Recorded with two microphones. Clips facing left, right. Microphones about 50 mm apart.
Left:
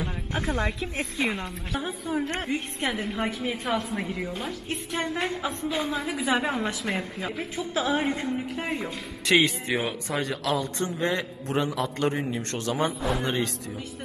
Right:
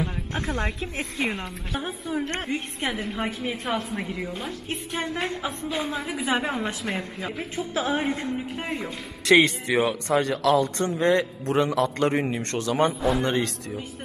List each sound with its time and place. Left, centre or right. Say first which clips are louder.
0.0 s a sound: right 1 dB; centre
1.3 s a woman's voice: even; centre
2.1 s a woman's voice: even; centre
2.4 s a woman's voice: even; centre
7.5 s a woman's voice: right 1 dB; right
8.0 s a woman's voice: even; centre
9.2 s speech: right 4 dB; right